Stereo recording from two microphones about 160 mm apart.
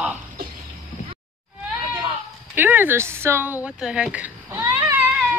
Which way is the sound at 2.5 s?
10° right (ahead or behind).